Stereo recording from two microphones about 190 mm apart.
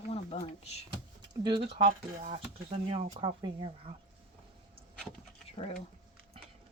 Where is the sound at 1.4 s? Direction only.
25° right (ahead or behind).